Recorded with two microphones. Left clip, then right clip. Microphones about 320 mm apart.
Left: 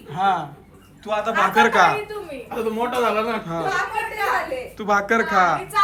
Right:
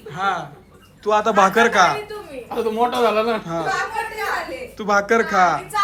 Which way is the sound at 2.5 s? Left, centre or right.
Right.